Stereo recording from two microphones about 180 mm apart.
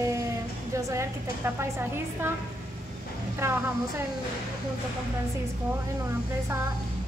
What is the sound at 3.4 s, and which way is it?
Speech, 15° right (ahead or behind).